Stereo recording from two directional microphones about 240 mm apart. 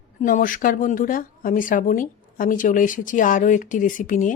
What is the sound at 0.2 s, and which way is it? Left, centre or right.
Speech, left.